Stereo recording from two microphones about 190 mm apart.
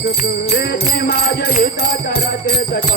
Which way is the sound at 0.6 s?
55° left (ahead or behind).